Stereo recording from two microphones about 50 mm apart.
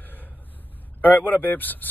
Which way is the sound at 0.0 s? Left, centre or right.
Left.